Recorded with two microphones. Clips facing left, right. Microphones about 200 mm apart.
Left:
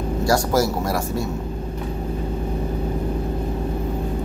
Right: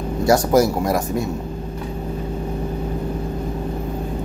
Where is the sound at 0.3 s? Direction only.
20° right (ahead or behind).